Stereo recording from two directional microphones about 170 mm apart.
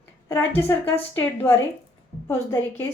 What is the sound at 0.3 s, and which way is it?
A woman's voice, 15° left (ahead or behind).